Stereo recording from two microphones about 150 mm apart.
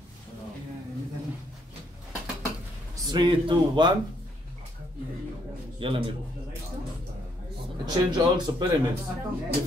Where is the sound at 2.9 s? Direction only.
30° right (ahead or behind).